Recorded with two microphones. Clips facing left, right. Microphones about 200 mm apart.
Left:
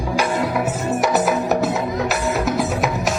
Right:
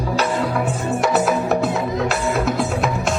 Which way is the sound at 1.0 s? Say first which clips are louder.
Even; centre (ahead or behind).